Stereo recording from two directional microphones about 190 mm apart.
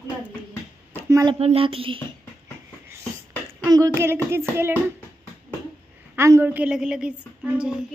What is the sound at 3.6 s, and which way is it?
Speech, 15° right (ahead or behind).